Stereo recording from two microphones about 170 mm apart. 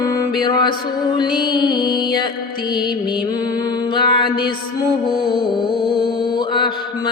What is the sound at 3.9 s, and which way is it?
Mantra, 30° left (ahead or behind).